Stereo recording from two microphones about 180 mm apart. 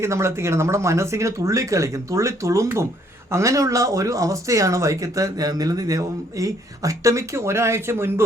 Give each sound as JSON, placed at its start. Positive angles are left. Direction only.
{"t": 0.0, "sound": "speech", "side_deg": -15}